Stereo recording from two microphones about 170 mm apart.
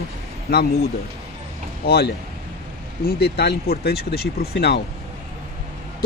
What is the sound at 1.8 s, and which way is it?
Speech, 70° left (ahead or behind).